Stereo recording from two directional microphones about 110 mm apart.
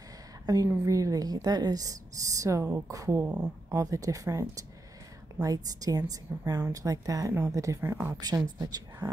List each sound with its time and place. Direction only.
0.5 s speech: 30° right (ahead or behind)